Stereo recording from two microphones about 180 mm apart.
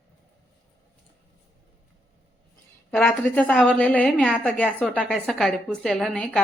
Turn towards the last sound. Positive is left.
turn(degrees=5)  # may be behind; listen again after turning